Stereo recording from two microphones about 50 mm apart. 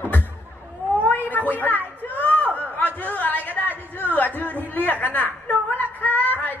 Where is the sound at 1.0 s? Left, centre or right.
Left.